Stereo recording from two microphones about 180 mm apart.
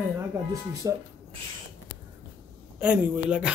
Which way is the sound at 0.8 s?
20° right (ahead or behind).